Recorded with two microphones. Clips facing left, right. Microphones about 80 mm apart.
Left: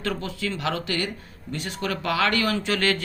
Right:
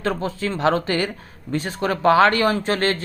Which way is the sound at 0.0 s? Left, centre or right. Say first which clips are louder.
Right 5 dB; right.